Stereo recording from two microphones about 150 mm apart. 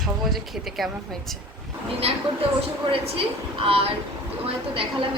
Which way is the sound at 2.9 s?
35° right (ahead or behind).